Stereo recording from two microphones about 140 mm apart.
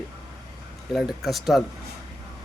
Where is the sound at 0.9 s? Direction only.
Centre (ahead or behind).